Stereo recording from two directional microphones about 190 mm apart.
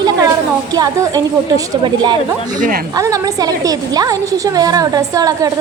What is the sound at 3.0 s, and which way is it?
A woman's voice, 20° right (ahead or behind).